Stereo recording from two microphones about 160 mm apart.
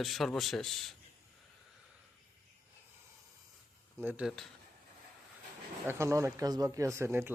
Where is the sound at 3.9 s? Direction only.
10° right (ahead or behind).